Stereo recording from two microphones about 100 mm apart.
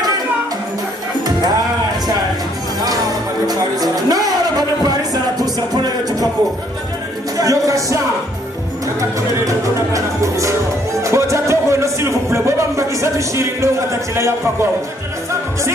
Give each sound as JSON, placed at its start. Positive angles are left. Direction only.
{"t": 3.4, "sound": "music", "side_deg": -40}
{"t": 7.3, "sound": "music", "side_deg": -35}
{"t": 9.4, "sound": "music", "side_deg": -35}
{"t": 11.1, "sound": "speech", "side_deg": -30}